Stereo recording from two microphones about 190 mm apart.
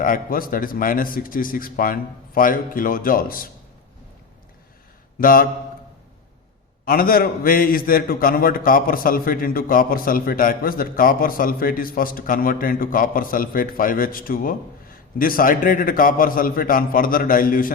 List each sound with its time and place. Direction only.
0.0 s a man's voice: 45° left (ahead or behind)
5.2 s a man's voice: 50° left (ahead or behind)
6.8 s a man's voice: 50° left (ahead or behind)